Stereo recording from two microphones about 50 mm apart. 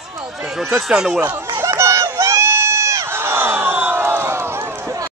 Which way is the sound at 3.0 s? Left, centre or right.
Right.